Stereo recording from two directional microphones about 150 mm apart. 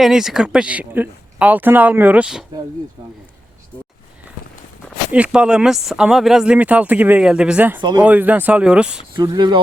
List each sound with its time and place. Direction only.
0.0 s speech: 5° right (ahead or behind)
5.1 s speech: 10° right (ahead or behind)
9.1 s speech: 30° right (ahead or behind)